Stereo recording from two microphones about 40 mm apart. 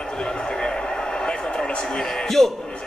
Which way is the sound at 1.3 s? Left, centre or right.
Centre.